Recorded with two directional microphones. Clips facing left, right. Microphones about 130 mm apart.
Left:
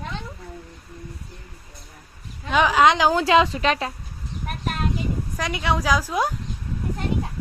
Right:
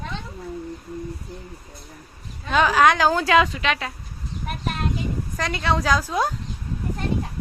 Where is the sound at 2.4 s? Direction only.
15° left (ahead or behind); by 3.9 s 35° left (ahead or behind).